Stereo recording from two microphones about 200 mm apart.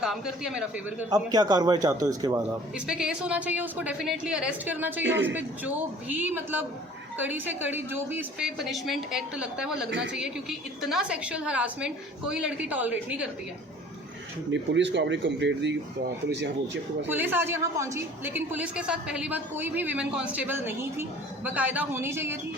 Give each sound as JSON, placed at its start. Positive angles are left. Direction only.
{"t": 0.0, "sound": "a woman's voice", "side_deg": -5}
{"t": 1.1, "sound": "a man's voice", "side_deg": -20}
{"t": 2.7, "sound": "a woman's voice", "side_deg": -5}
{"t": 5.0, "sound": "a man's voice", "side_deg": -65}
{"t": 5.3, "sound": "a woman's voice", "side_deg": -10}
{"t": 9.9, "sound": "a man's voice", "side_deg": -60}
{"t": 10.2, "sound": "a woman's voice", "side_deg": -5}
{"t": 14.5, "sound": "a man's voice", "side_deg": -65}
{"t": 17.1, "sound": "a woman's voice", "side_deg": -10}